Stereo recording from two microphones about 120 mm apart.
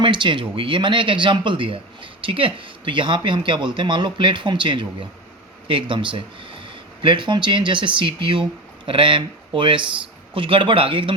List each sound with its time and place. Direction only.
0.0 s a man's voice: 40° right (ahead or behind)